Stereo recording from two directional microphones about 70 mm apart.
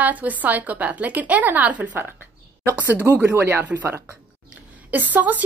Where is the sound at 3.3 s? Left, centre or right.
Right.